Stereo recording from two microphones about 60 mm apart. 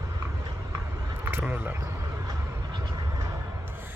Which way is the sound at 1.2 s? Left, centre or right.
Right.